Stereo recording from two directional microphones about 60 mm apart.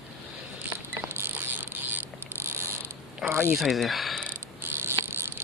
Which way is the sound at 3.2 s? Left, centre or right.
Right.